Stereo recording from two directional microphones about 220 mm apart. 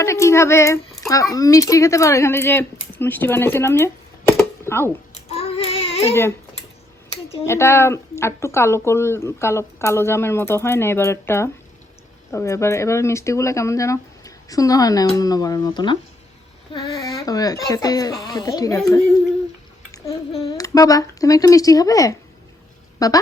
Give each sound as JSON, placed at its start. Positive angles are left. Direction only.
{"t": 0.0, "sound": "speech", "side_deg": 15}
{"t": 5.3, "sound": "child singing", "side_deg": 25}
{"t": 7.4, "sound": "speech", "side_deg": 10}
{"t": 20.6, "sound": "speech", "side_deg": 15}